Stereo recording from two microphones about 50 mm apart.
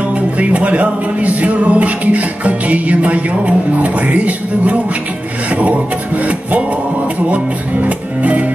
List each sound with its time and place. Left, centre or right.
0.4 s music: right
8.2 s music: right